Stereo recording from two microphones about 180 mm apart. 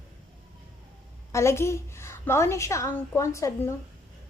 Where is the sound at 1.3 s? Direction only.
15° left (ahead or behind).